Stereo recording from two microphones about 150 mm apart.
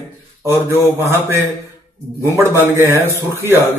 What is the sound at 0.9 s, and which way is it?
Speech, 15° right (ahead or behind).